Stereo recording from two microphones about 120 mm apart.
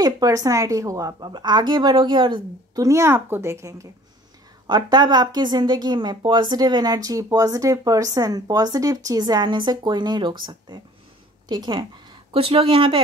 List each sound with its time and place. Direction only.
0.0 s a woman's voice: 30° right (ahead or behind)
2.8 s speech: 25° right (ahead or behind)
4.6 s a woman's voice: 35° right (ahead or behind)
12.3 s speech: 50° right (ahead or behind)